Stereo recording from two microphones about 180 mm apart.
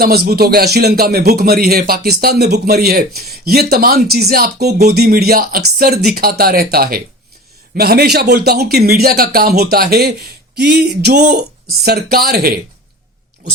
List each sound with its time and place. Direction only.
0.0 s speech: 60° right (ahead or behind)